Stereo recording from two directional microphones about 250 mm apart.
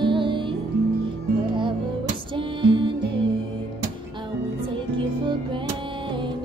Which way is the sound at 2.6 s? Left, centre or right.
Centre.